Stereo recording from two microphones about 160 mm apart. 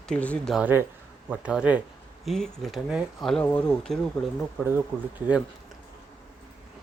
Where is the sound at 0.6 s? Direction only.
10° right (ahead or behind).